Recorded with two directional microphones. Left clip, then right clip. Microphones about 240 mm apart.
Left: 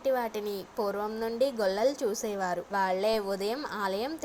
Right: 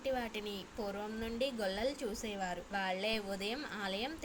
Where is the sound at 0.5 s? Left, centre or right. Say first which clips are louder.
Left 10 dB; centre.